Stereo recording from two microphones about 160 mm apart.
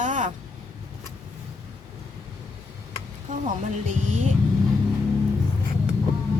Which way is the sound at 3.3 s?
50° right (ahead or behind).